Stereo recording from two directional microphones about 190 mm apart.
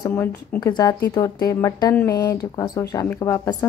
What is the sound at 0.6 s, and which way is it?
Speech, 20° left (ahead or behind).